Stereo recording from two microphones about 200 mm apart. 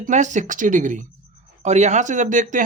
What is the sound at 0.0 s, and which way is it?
Speech, 35° right (ahead or behind).